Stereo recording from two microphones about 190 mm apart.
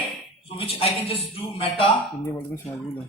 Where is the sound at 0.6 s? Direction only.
30° left (ahead or behind).